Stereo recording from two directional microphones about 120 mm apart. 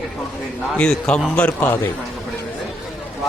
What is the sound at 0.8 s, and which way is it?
A man's voice, 5° left (ahead or behind).